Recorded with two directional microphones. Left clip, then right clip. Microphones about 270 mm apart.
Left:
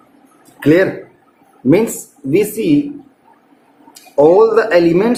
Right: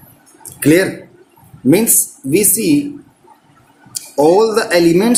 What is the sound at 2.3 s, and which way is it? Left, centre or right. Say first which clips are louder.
Speech: even; right.